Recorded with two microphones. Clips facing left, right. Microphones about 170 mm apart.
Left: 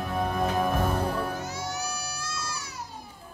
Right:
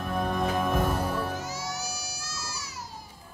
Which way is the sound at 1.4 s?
60° left (ahead or behind).